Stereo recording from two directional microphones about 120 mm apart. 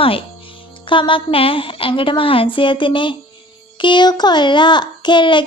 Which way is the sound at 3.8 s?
40° left (ahead or behind).